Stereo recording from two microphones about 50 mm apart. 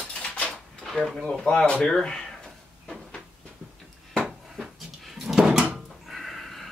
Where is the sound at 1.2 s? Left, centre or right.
Centre.